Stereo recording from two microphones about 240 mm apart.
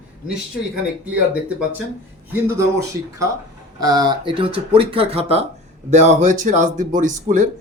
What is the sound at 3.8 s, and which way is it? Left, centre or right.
Speech, centre.